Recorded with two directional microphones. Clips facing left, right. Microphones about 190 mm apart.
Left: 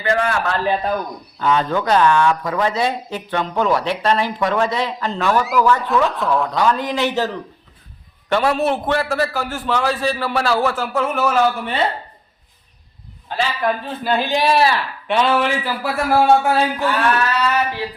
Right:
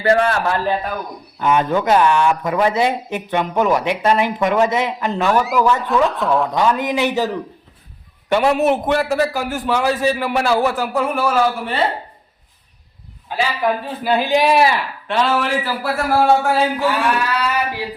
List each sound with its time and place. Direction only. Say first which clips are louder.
0.0 s a man's voice: right 4 dB; 35° right (ahead or behind)
1.4 s a man's voice: right 2 dB; 15° right (ahead or behind)
5.4 s a man's voice: even; centre (ahead or behind)
6.5 s a man's voice: right 1 dB; 15° right (ahead or behind)
8.3 s a man's voice: right 2 dB; 15° right (ahead or behind)
13.2 s a man's voice: right 1 dB; 10° right (ahead or behind)
15.1 s a man's voice: left 1 dB; centre (ahead or behind)